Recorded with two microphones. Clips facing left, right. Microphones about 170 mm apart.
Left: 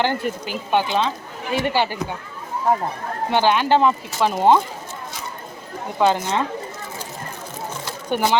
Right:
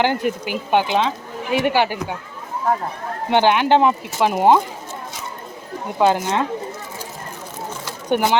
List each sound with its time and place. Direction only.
0.0 s speech: 15° right (ahead or behind)
3.2 s speech: 20° right (ahead or behind)
6.0 s speech: 10° right (ahead or behind)
8.1 s speech: 15° right (ahead or behind)